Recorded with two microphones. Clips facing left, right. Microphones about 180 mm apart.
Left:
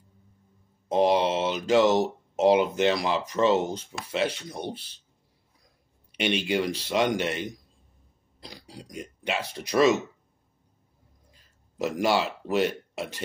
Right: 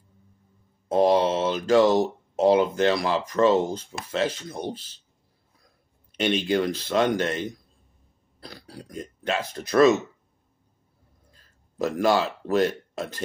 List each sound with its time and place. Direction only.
0.9 s speech: 15° left (ahead or behind)
3.3 s speech: 35° right (ahead or behind)
4.3 s speech: 15° left (ahead or behind)
6.1 s speech: 10° left (ahead or behind)
11.8 s speech: 10° left (ahead or behind)